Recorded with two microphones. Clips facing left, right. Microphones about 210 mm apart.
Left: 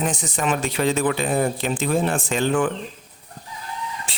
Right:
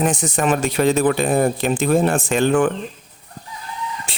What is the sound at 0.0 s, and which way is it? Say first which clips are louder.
Speech: right 5 dB; 50° right (ahead or behind).